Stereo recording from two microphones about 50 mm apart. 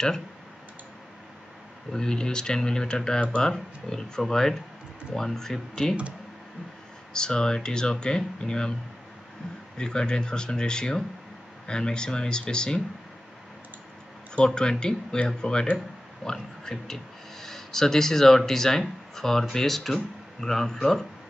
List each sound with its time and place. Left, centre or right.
1.9 s speech: centre
7.2 s speech: centre
9.8 s speech: centre
14.3 s speech: centre